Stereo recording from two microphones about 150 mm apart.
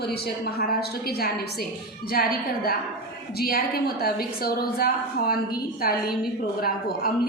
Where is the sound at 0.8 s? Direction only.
90° left.